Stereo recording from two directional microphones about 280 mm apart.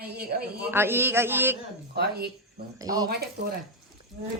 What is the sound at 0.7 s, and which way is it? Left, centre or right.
Speech, centre.